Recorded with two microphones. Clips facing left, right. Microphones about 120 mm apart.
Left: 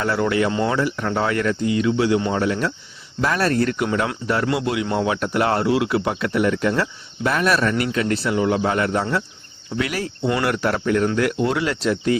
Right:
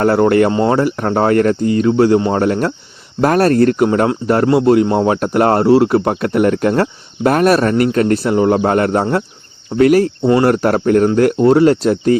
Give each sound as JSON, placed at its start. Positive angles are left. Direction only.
{"t": 0.0, "sound": "a man's voice", "side_deg": -50}
{"t": 0.5, "sound": "a man's voice", "side_deg": -40}